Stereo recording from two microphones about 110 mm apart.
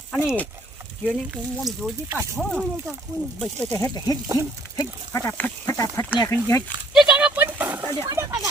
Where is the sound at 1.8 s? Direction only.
5° left (ahead or behind).